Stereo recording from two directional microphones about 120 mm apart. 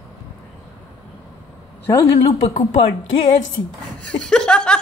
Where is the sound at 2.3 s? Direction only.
90° left.